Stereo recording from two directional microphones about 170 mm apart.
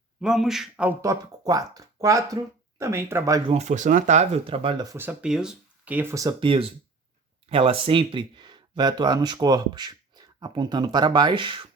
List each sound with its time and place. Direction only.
0.2 s a man's voice: 5° right (ahead or behind)
1.0 s speech: 20° right (ahead or behind)
3.5 s speech: 45° right (ahead or behind); by 6.3 s 15° right (ahead or behind)
6.4 s speech: 30° right (ahead or behind)